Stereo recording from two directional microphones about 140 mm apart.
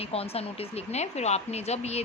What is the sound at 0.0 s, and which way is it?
Speech, 45° left (ahead or behind).